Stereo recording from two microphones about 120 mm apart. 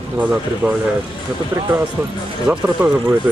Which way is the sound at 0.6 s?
10° right (ahead or behind).